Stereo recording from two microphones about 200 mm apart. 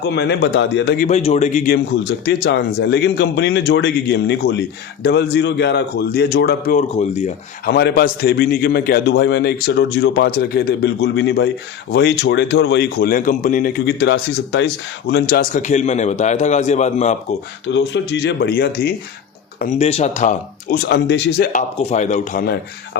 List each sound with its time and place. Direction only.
0.0 s a man's voice: 55° left (ahead or behind)
1.0 s a man's voice: 35° left (ahead or behind)
1.7 s a man's voice: 55° left (ahead or behind)
6.7 s a man's voice: 35° left (ahead or behind)
7.6 s a man's voice: 55° left (ahead or behind)
15.5 s a man's voice: 35° left (ahead or behind)
17.7 s a man's voice: 60° left (ahead or behind)
19.5 s a man's voice: 35° left (ahead or behind)
20.7 s a man's voice: 60° left (ahead or behind)
21.5 s a man's voice: 35° left (ahead or behind)